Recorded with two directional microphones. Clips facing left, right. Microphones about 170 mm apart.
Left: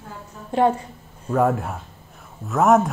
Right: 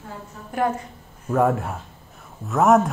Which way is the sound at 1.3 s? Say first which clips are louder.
Even; centre (ahead or behind).